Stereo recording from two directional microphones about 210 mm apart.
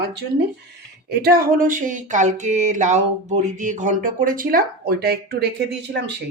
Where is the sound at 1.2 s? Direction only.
45° right (ahead or behind).